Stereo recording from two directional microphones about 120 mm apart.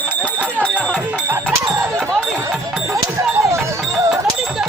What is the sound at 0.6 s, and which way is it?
Music, 10° left (ahead or behind).